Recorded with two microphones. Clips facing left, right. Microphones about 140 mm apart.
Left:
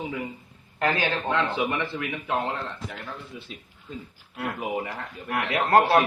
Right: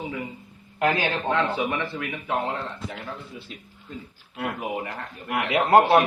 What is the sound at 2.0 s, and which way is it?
Speech, centre (ahead or behind).